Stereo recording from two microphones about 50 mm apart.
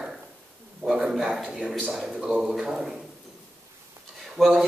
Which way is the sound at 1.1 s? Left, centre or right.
Centre.